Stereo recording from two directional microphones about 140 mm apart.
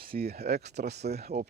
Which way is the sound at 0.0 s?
90° right.